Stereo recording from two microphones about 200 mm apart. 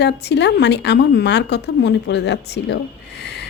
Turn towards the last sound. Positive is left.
turn(degrees=55)  # may be behind; listen again after turning